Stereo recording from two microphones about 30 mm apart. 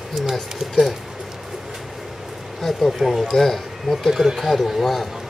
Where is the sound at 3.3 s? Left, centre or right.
Centre.